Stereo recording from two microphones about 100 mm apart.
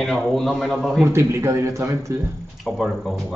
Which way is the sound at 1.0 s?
30° right (ahead or behind).